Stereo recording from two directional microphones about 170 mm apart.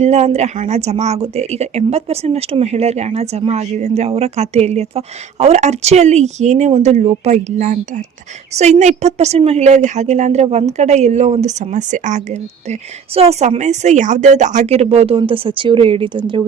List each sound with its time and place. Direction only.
0.0 s speech: 40° right (ahead or behind)